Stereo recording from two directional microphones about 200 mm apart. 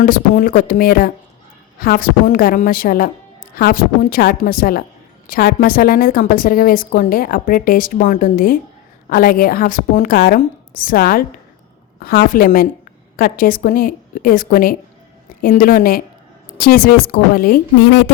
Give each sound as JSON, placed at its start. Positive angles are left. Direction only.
{"t": 0.0, "sound": "a woman's voice", "side_deg": 40}